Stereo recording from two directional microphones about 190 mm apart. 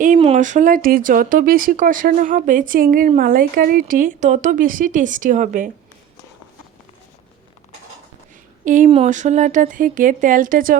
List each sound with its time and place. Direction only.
0.0 s speech: 35° right (ahead or behind)
8.6 s speech: 40° right (ahead or behind)